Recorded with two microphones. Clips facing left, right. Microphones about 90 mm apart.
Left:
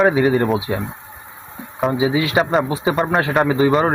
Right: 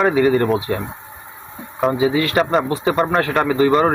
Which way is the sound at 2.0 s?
15° left (ahead or behind).